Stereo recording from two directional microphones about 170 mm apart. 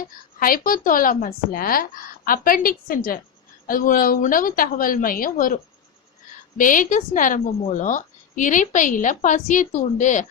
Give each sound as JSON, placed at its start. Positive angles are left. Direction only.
{"t": 0.3, "sound": "speech", "side_deg": 55}
{"t": 6.6, "sound": "a woman's voice", "side_deg": 50}